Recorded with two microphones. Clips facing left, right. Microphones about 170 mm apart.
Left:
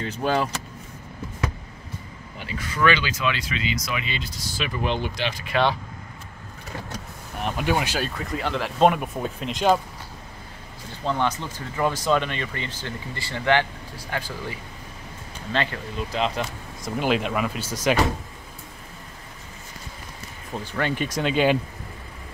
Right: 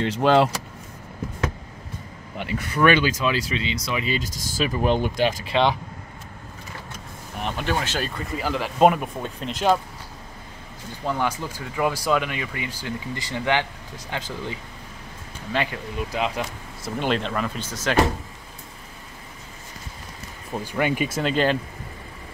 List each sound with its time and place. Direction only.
0.0 s speech: 80° right
2.3 s speech: 60° right (ahead or behind)
7.3 s speech: 5° left (ahead or behind)
8.0 s speech: centre (ahead or behind)
11.1 s speech: 10° right (ahead or behind)
17.0 s speech: 5° left (ahead or behind)
20.5 s speech: 10° right (ahead or behind)